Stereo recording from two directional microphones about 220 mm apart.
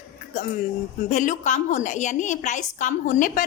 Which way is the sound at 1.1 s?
35° left (ahead or behind).